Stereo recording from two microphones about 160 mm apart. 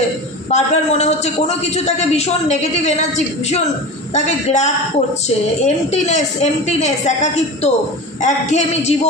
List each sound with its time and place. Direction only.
0.5 s a man's voice: 45° left (ahead or behind)